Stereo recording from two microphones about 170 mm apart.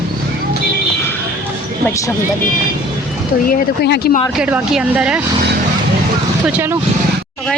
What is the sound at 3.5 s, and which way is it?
Speech, 75° left (ahead or behind).